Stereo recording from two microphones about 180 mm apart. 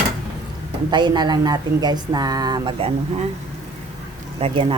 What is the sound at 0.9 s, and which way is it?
Speech, 25° right (ahead or behind).